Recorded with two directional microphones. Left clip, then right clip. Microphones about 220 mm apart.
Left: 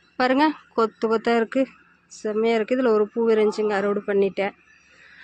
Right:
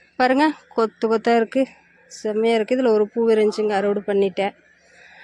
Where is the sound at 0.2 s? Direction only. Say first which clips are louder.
Right 2 dB; 15° right (ahead or behind).